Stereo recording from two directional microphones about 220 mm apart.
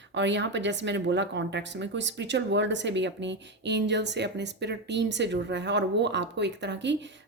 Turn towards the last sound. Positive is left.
turn(degrees=-55)  # may be behind; listen again after turning